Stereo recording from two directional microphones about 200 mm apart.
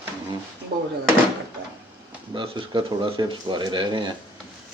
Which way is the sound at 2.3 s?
25° right (ahead or behind).